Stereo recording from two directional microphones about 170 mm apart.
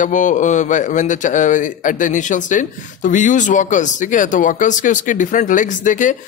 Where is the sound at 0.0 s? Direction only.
50° left (ahead or behind).